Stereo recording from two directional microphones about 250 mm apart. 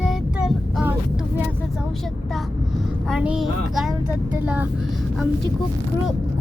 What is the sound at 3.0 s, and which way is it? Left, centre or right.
Child singing, centre.